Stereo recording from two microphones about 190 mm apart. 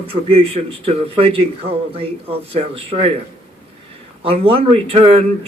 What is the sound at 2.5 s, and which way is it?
Speech, 30° right (ahead or behind).